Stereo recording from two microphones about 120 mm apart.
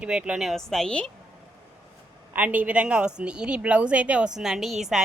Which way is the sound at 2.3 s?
15° right (ahead or behind).